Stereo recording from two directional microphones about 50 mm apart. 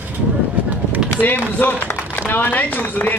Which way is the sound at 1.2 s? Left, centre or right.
Left.